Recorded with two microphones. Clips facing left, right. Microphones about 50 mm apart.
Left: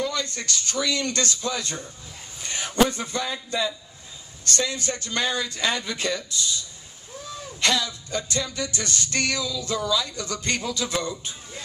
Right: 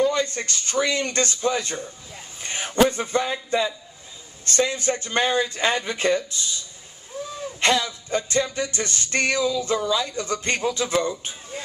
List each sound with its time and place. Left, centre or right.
0.0 s music: right
2.4 s a man's voice: right
4.5 s music: right
7.6 s music: right